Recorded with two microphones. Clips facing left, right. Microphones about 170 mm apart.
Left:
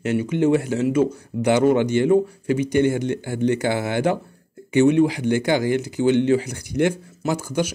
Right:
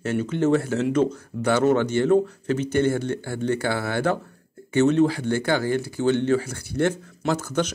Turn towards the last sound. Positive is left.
turn(degrees=10)  # may be behind; listen again after turning